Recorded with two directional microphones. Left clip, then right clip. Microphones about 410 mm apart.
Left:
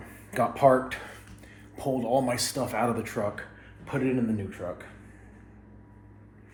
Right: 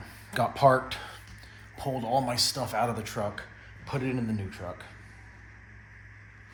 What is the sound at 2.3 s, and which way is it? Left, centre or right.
Speech, centre.